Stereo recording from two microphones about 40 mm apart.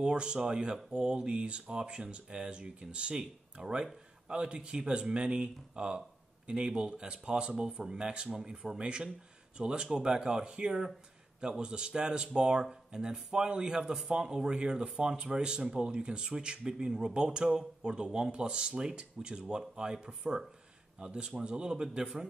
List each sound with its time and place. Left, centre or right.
0.0 s speech: right